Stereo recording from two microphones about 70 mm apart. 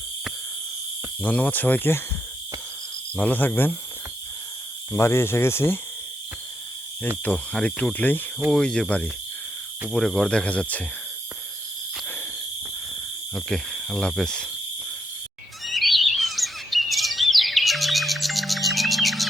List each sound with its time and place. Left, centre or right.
1.2 s speech: centre
3.2 s speech: left
4.9 s speech: left
7.3 s speech: centre
12.0 s owl: left
13.3 s cricket: centre
15.6 s chirp: centre